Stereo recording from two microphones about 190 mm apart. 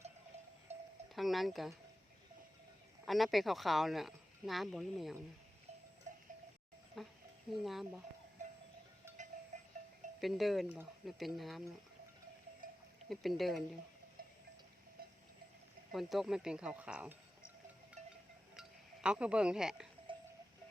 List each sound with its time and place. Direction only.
0.7 s sheep: 35° right (ahead or behind)
1.1 s speech: centre (ahead or behind)
3.1 s speech: centre (ahead or behind)
7.0 s speech: centre (ahead or behind)
9.0 s wind chime: 15° right (ahead or behind)
10.2 s speech: centre (ahead or behind)
12.6 s sheep: 50° right (ahead or behind)
13.1 s speech: centre (ahead or behind)
14.2 s a sound: 50° right (ahead or behind)
15.9 s speech: centre (ahead or behind)
19.0 s speech: 5° right (ahead or behind)
20.1 s cowbell: 25° right (ahead or behind)